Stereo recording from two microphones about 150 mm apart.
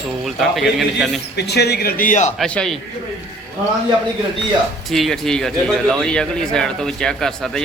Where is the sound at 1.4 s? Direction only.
90° left; by 2.3 s 55° left (ahead or behind).